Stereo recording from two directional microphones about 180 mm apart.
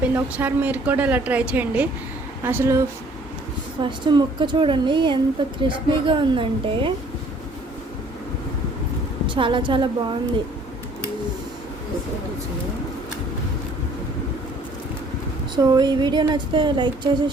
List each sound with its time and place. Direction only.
0.0 s speech: 10° right (ahead or behind)
3.8 s speech: 25° right (ahead or behind)
9.2 s speech: 30° right (ahead or behind)
15.5 s speech: 25° right (ahead or behind)